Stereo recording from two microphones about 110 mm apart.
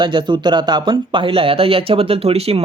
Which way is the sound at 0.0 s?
45° right (ahead or behind).